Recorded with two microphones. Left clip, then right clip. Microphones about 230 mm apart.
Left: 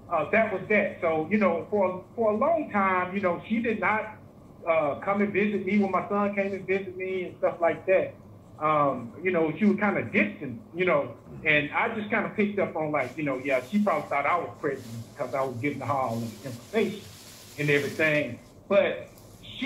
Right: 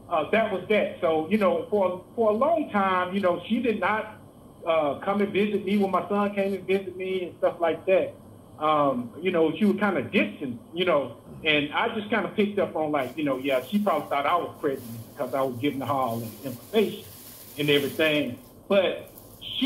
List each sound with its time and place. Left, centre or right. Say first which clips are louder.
0.1 s speech: right 1 dB; right
11.4 s speech: even; right
17.6 s speech: right 2 dB; right